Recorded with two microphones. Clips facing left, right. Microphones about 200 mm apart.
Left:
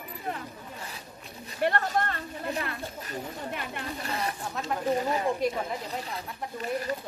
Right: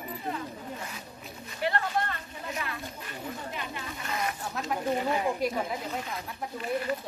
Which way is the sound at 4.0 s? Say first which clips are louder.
Even; 35° left (ahead or behind).